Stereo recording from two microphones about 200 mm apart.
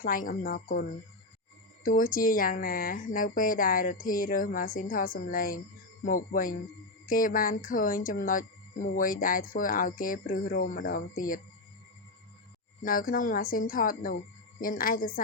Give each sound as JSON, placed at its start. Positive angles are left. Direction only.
{"t": 0.0, "sound": "speech", "side_deg": 45}
{"t": 12.8, "sound": "speech", "side_deg": 45}